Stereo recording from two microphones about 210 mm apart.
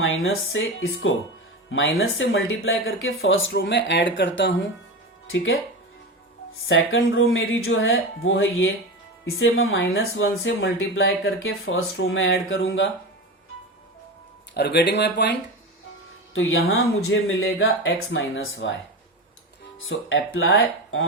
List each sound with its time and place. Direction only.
0.0 s speech: 70° left (ahead or behind)
14.5 s speech: 50° left (ahead or behind)
16.3 s speech: 70° left (ahead or behind)
19.9 s speech: 65° left (ahead or behind)